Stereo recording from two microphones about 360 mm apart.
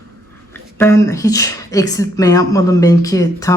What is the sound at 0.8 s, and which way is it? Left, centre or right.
Speech, centre.